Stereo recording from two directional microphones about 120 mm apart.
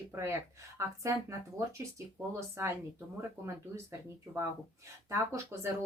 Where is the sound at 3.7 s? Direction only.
25° right (ahead or behind).